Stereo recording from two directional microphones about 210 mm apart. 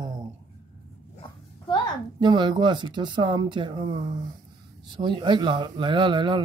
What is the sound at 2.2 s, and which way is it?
Speech, 20° right (ahead or behind).